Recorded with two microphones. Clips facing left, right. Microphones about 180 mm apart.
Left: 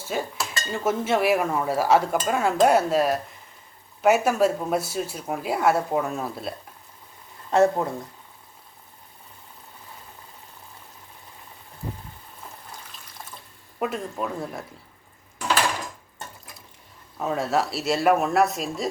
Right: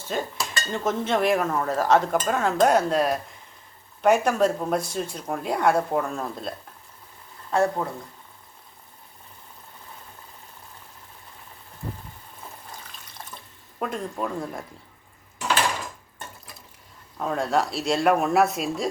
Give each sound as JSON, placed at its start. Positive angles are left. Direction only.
{"t": 0.0, "sound": "stir", "side_deg": 10}
{"t": 7.8, "sound": "speech", "side_deg": 25}
{"t": 13.7, "sound": "speech", "side_deg": 5}
{"t": 17.2, "sound": "speech", "side_deg": 5}